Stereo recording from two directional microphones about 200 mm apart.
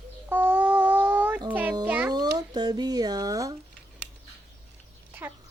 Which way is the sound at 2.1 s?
20° right (ahead or behind).